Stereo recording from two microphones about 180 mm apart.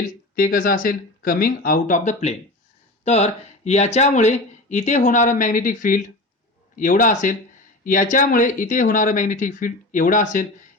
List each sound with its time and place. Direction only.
0.3 s speech: 50° left (ahead or behind)